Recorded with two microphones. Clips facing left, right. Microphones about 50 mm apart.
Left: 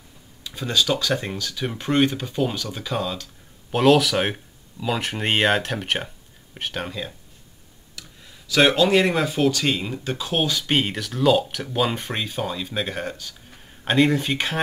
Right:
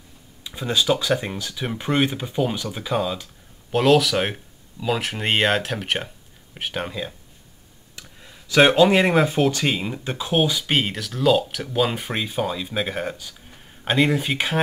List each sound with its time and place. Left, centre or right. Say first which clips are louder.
0.4 s speech: even; centre
8.2 s speech: right 2 dB; centre